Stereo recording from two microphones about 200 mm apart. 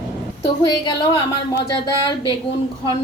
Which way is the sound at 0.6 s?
20° left (ahead or behind).